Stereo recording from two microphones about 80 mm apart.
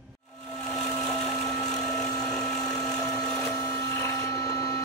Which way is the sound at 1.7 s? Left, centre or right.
Centre.